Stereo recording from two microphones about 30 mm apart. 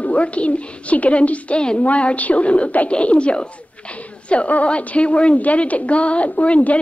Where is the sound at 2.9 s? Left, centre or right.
Left.